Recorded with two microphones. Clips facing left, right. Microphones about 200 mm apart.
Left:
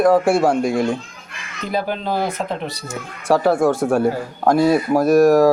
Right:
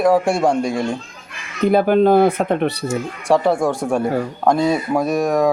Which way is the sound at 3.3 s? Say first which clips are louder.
Left 1 dB; 5° left (ahead or behind).